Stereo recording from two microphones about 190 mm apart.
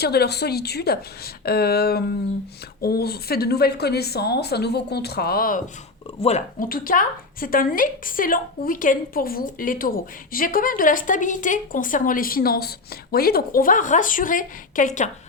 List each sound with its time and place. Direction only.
0.0 s a woman's voice: 55° left (ahead or behind)
6.1 s speech: 35° left (ahead or behind)
6.6 s a woman's voice: 50° left (ahead or behind)